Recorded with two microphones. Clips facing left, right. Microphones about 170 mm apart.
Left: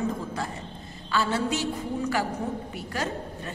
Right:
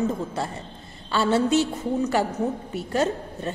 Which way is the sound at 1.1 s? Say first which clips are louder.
Right 6 dB; 30° right (ahead or behind).